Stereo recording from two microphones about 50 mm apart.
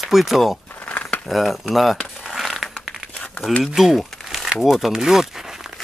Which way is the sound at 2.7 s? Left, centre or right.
Centre.